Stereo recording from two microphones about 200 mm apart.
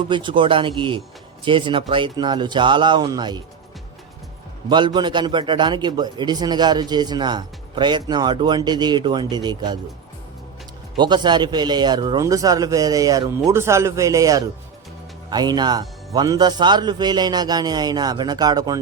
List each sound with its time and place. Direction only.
0.0 s a man's voice: 25° right (ahead or behind)
4.7 s a man's voice: 20° right (ahead or behind)
10.9 s a man's voice: 20° right (ahead or behind)